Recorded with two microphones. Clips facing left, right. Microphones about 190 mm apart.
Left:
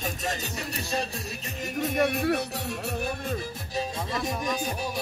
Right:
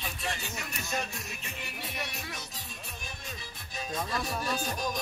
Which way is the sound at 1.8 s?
50° left (ahead or behind).